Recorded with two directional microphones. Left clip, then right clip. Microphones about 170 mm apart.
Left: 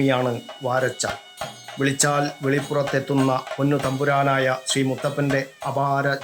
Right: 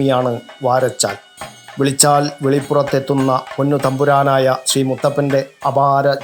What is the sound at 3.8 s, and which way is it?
Speech, 20° right (ahead or behind).